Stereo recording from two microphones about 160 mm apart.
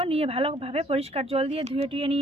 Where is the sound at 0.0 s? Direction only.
35° right (ahead or behind).